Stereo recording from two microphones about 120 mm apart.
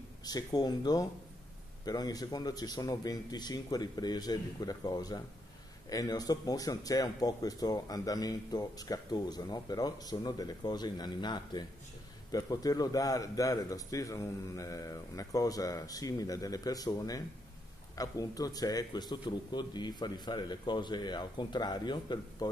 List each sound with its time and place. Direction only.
0.2 s a man's voice: 30° left (ahead or behind)